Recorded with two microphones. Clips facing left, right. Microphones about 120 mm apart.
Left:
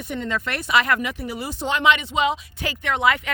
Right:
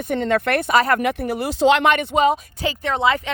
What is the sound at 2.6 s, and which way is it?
Speech, 30° right (ahead or behind).